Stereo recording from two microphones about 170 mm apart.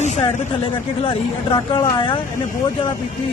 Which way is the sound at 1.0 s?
30° left (ahead or behind).